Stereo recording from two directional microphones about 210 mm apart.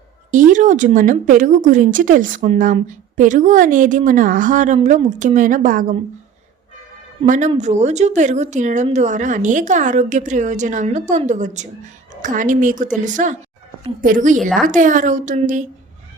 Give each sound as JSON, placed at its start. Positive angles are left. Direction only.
{"t": 0.3, "sound": "speech", "side_deg": -40}
{"t": 7.3, "sound": "speech", "side_deg": -35}